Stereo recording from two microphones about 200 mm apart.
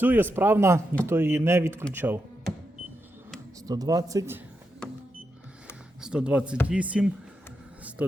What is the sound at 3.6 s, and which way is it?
Speech, 20° right (ahead or behind).